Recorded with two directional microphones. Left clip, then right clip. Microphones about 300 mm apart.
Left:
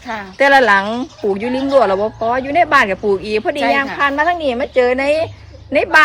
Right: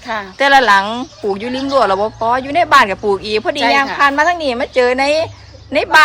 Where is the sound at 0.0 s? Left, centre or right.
Right.